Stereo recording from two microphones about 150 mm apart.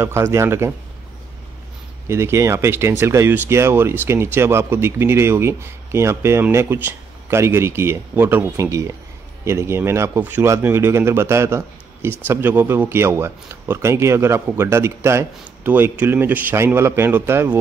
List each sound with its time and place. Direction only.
0.0 s speech: 20° right (ahead or behind)
2.0 s speech: 20° right (ahead or behind)